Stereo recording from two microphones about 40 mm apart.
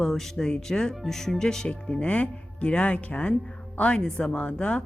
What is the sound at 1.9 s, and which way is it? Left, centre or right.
Speech, left.